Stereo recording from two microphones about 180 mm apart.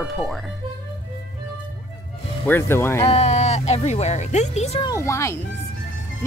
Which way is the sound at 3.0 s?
35° left (ahead or behind).